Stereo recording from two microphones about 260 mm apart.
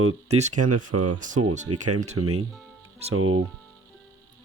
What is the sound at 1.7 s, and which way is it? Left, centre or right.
Speech, right.